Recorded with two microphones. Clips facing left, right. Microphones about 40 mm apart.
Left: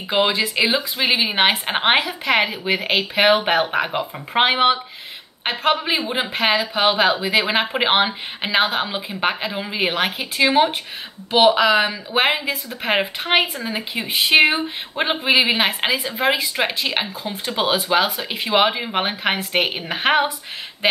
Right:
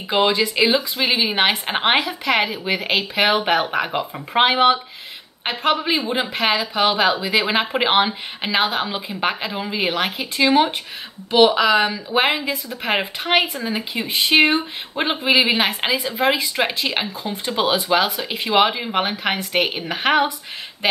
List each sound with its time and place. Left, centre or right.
0.1 s speech: centre